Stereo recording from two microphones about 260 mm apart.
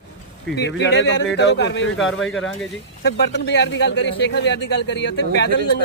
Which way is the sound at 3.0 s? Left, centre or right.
Left.